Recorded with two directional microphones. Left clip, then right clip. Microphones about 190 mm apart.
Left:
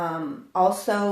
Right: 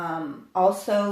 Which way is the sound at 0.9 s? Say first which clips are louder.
Right 1 dB; 35° left (ahead or behind).